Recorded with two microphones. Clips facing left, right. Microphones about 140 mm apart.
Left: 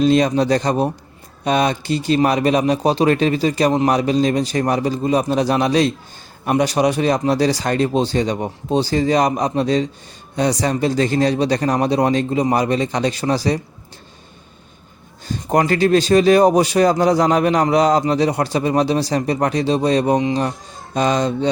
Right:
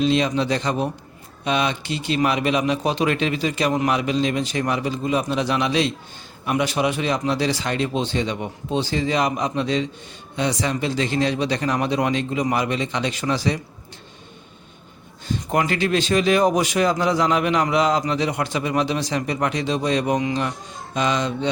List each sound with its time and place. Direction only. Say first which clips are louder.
0.0 s a man's voice: left 5 dB; 45° left (ahead or behind)
15.3 s a man's voice: left 5 dB; 40° left (ahead or behind)